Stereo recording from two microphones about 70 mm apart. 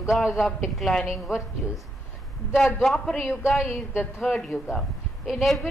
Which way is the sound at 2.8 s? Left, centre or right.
Centre.